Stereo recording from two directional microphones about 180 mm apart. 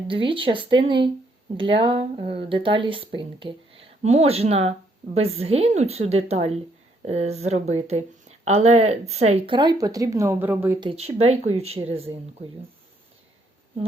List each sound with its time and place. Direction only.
0.1 s speech: 30° right (ahead or behind); by 10.8 s 10° right (ahead or behind)
10.8 s speech: 30° right (ahead or behind)